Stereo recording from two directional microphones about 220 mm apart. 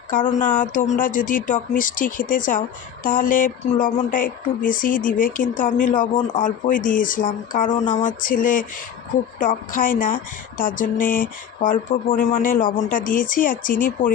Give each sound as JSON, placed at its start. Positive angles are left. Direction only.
{"t": 0.1, "sound": "speech", "side_deg": 35}